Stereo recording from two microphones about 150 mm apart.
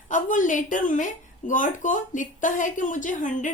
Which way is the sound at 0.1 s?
60° left (ahead or behind).